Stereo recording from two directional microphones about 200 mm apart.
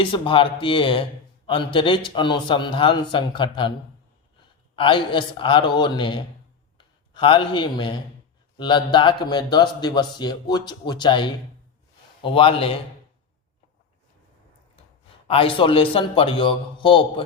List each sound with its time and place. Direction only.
0.0 s a man's voice: 25° left (ahead or behind)
4.7 s a man's voice: 25° left (ahead or behind)
15.3 s a man's voice: 25° left (ahead or behind)